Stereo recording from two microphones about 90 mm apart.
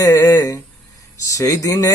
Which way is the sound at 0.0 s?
40° left (ahead or behind).